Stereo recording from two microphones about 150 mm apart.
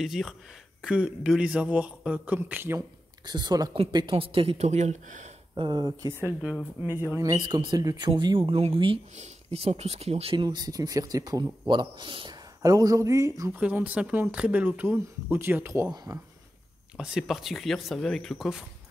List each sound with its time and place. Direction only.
0.0 s speech: centre (ahead or behind)
3.3 s speech: 30° right (ahead or behind); by 5.3 s 50° right (ahead or behind)
5.5 s speech: 30° right (ahead or behind)
6.1 s speech: 15° right (ahead or behind); by 10.3 s 45° right (ahead or behind)
10.3 s speech: 30° right (ahead or behind)
12.6 s speech: 20° right (ahead or behind)
13.5 s speech: 10° right (ahead or behind)
16.9 s speech: 5° right (ahead or behind)